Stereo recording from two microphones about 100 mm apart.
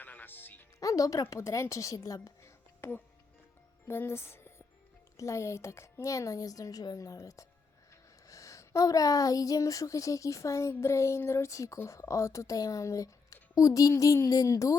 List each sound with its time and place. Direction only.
0.0 s music: 15° left (ahead or behind)
0.8 s a woman's voice: 35° left (ahead or behind)
2.8 s a woman's voice: 20° left (ahead or behind)